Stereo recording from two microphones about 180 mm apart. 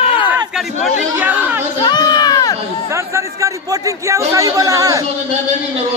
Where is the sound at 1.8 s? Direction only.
25° left (ahead or behind).